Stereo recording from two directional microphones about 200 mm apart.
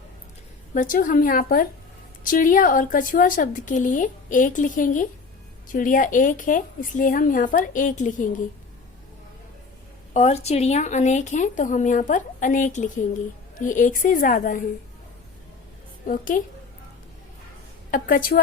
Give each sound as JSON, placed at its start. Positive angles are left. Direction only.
{"t": 0.7, "sound": "a woman's voice", "side_deg": 40}
{"t": 10.2, "sound": "a woman's voice", "side_deg": 35}
{"t": 16.0, "sound": "a woman's voice", "side_deg": 45}
{"t": 17.9, "sound": "a woman's voice", "side_deg": 45}